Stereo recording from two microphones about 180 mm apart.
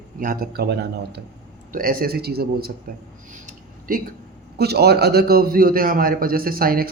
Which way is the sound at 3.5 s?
50° right (ahead or behind).